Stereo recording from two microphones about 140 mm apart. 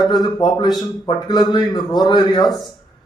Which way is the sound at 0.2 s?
30° left (ahead or behind).